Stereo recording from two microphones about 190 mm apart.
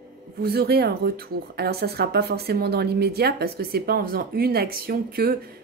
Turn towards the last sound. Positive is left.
turn(degrees=-50)  # may be behind; listen again after turning